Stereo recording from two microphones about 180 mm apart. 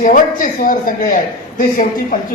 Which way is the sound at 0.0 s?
50° left (ahead or behind).